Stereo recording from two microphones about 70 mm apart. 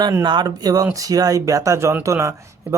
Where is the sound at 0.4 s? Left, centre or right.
Right.